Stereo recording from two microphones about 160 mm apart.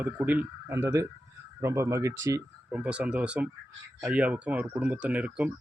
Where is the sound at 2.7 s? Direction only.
5° right (ahead or behind).